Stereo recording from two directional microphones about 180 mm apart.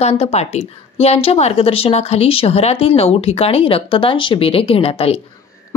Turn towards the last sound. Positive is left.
turn(degrees=35)  # may be behind; listen again after turning